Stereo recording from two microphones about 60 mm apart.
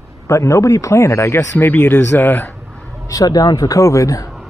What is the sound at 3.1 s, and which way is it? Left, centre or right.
Speech, left.